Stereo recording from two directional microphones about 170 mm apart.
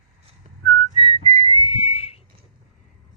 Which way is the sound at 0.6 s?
30° left (ahead or behind).